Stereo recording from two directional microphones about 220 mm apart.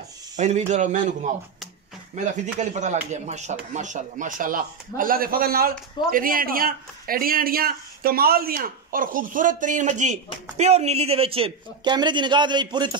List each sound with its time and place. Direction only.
0.4 s speech: 30° right (ahead or behind)